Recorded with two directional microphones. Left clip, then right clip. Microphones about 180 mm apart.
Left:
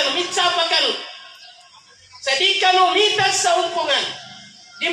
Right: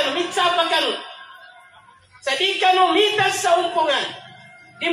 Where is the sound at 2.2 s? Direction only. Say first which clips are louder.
Left 1 dB; 35° right (ahead or behind).